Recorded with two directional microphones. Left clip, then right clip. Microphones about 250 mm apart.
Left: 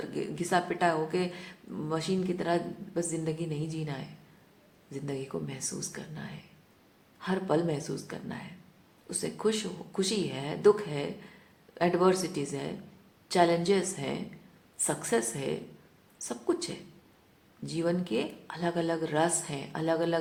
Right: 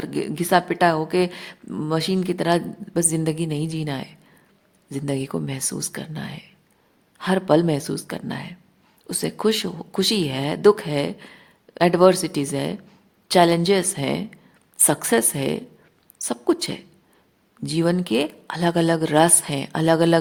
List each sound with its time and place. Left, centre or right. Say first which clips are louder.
0.0 s speech: right 8 dB; right